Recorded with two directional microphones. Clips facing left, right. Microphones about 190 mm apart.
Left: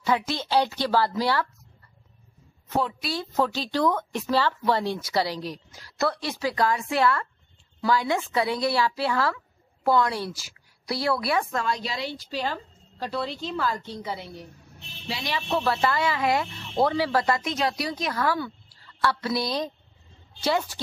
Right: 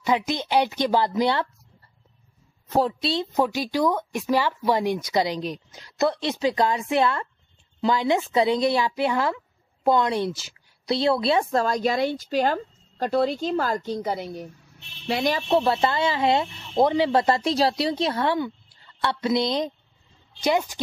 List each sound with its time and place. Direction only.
0.0 s speech: 15° right (ahead or behind)
2.8 s speech: 25° right (ahead or behind)
3.3 s a woman's voice: 10° right (ahead or behind)
11.5 s a woman's voice: 40° right (ahead or behind)
15.4 s a woman's voice: 25° right (ahead or behind)